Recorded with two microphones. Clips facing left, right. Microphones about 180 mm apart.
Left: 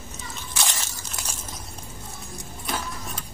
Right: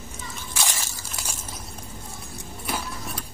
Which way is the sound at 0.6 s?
10° right (ahead or behind).